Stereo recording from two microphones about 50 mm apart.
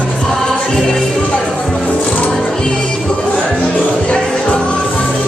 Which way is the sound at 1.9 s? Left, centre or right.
Left.